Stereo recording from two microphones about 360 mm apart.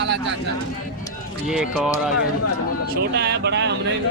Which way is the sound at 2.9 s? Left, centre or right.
Right.